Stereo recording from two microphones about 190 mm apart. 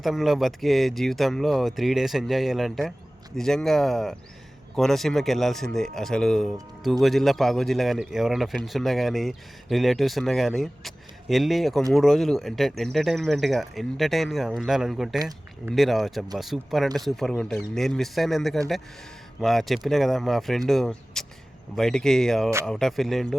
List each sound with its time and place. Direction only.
0.0 s speech: centre (ahead or behind)
15.2 s speech: 20° right (ahead or behind)
15.7 s speech: centre (ahead or behind)